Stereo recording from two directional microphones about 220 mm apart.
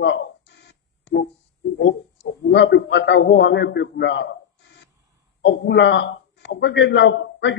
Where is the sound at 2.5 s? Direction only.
55° left (ahead or behind).